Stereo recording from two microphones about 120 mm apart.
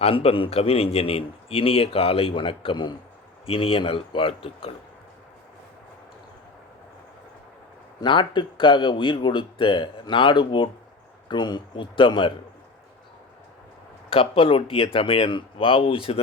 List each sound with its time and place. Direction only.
0.0 s a man's voice: 55° left (ahead or behind)
8.0 s speech: 40° left (ahead or behind)
14.1 s a man's voice: 50° left (ahead or behind)